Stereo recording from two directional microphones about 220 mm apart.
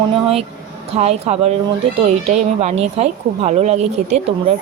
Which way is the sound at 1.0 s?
30° right (ahead or behind).